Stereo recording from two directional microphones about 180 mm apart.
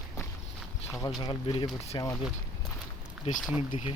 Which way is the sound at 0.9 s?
15° left (ahead or behind).